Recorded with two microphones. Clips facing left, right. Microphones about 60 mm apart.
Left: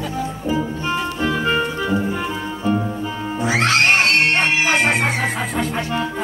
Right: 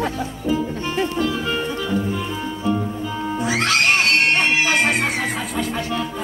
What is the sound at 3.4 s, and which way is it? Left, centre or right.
Music, left.